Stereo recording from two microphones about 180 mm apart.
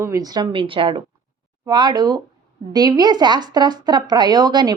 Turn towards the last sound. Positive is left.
turn(degrees=-20)  # may be behind; listen again after turning